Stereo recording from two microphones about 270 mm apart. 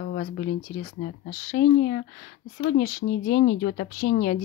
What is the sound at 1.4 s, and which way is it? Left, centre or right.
Speech, left.